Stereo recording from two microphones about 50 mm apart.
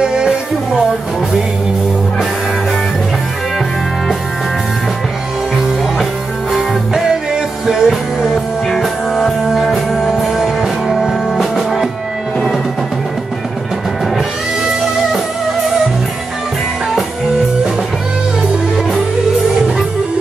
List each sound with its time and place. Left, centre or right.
0.0 s music: centre
7.6 s music: centre